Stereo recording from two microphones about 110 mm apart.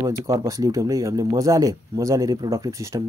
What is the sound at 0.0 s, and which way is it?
Speech, 30° right (ahead or behind).